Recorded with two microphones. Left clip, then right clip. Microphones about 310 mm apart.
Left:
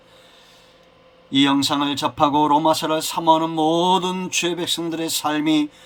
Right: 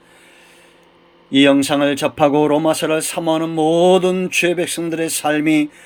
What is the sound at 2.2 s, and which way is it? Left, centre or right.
Speech, left.